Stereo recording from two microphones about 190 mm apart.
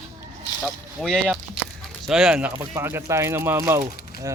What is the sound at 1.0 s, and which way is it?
Speech, centre (ahead or behind).